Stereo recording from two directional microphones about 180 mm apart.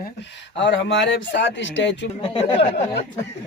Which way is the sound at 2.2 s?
30° left (ahead or behind).